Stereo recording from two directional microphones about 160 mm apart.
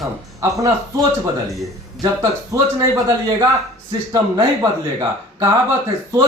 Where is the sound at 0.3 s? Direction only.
20° right (ahead or behind).